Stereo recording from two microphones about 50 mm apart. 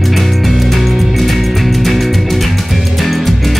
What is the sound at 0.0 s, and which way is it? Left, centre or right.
Music, centre.